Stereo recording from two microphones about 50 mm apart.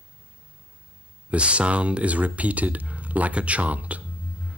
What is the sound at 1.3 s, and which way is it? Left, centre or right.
Speech, right.